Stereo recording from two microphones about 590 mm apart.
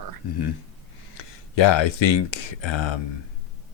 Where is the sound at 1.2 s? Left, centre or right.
Left.